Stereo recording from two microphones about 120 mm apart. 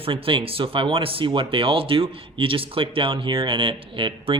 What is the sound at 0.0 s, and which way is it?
Speech, 45° right (ahead or behind).